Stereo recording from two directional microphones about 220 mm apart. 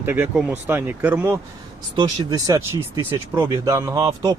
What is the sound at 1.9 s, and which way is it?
Speech, 20° right (ahead or behind).